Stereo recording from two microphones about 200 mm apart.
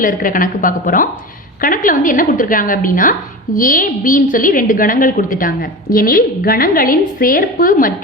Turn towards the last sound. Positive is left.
turn(degrees=45)  # may be behind; listen again after turning